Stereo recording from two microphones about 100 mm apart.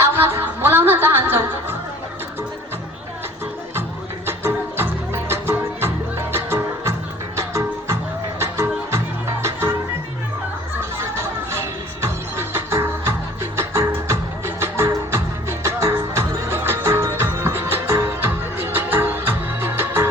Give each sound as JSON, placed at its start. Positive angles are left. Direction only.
{"t": 0.0, "sound": "music", "side_deg": -25}
{"t": 4.3, "sound": "music", "side_deg": -25}
{"t": 10.9, "sound": "music", "side_deg": -25}